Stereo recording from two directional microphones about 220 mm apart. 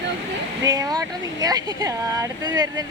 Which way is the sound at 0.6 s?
15° right (ahead or behind).